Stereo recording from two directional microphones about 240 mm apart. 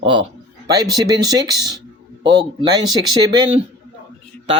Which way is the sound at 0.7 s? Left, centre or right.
Centre.